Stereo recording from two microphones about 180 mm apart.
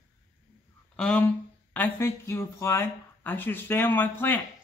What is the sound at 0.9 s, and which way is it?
Speech, 5° left (ahead or behind).